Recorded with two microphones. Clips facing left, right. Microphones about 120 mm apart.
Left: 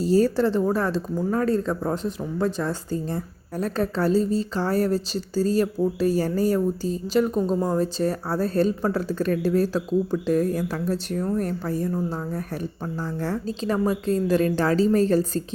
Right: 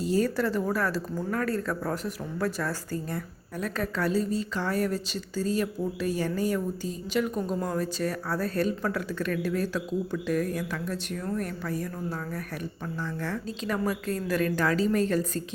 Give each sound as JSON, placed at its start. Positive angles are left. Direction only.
{"t": 0.0, "sound": "speech", "side_deg": 35}